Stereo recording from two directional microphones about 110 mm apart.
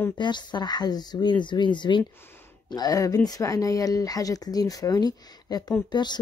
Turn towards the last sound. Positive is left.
turn(degrees=40)  # may be behind; listen again after turning